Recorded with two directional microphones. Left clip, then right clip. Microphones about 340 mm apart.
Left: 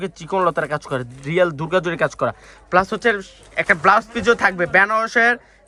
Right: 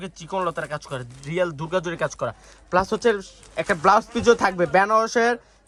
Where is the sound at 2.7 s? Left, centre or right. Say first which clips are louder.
Left 3 dB; centre.